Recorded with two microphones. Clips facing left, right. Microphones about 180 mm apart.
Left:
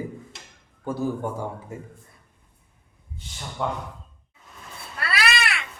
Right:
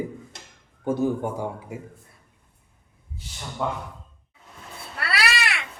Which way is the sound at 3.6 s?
Centre (ahead or behind).